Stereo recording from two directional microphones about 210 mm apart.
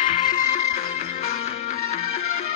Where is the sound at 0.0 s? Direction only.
35° left (ahead or behind).